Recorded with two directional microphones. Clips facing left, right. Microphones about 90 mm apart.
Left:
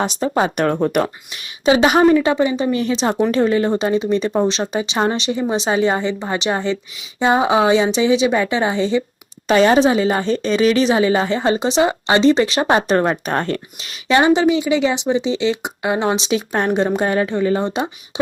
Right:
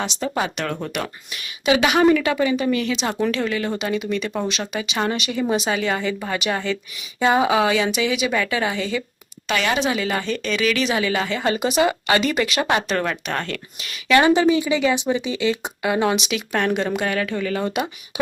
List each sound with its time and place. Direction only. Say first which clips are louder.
0.0 s a woman's voice: left 6 dB; 35° left (ahead or behind)